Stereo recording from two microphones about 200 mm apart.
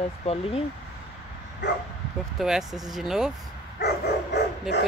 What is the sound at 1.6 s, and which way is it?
Speech, 60° left (ahead or behind).